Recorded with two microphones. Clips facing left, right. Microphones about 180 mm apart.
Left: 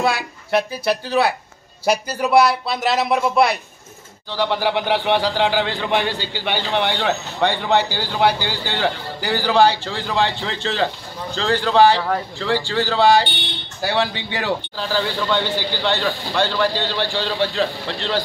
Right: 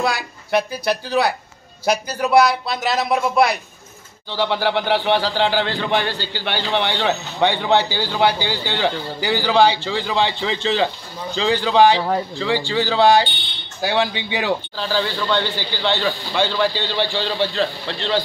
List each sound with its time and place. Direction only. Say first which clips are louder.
0.0 s speech: left 1 dB; centre (ahead or behind)
5.7 s speech: even; centre (ahead or behind)
6.1 s speech: left 1 dB; 15° left (ahead or behind)
6.6 s speech: right 1 dB; centre (ahead or behind)